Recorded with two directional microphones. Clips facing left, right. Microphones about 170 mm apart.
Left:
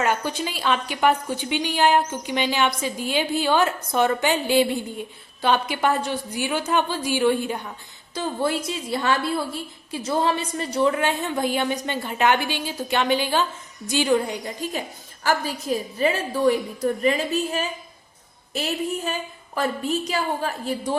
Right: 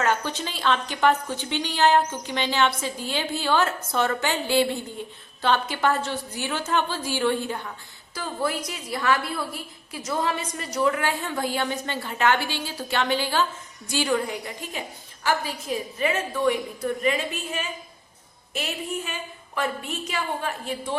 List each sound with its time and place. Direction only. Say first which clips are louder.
0.0 s a woman's voice: left 2 dB; 15° left (ahead or behind)
8.1 s a woman's voice: left 4 dB; 25° left (ahead or behind)
15.2 s a woman's voice: left 2 dB; 40° left (ahead or behind)